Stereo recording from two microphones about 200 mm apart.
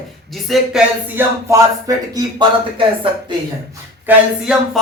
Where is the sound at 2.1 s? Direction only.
25° right (ahead or behind).